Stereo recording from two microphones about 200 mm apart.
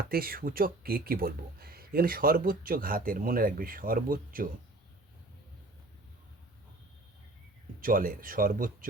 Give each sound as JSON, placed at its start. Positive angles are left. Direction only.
{"t": 0.1, "sound": "speech", "side_deg": -50}
{"t": 7.8, "sound": "speech", "side_deg": -45}